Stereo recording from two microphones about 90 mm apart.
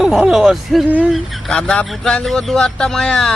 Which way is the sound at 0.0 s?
5° right (ahead or behind).